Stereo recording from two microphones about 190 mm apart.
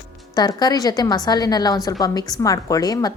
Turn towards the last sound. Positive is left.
turn(degrees=20)  # may be behind; listen again after turning